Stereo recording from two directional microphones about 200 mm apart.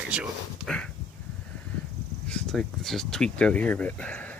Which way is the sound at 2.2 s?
5° left (ahead or behind).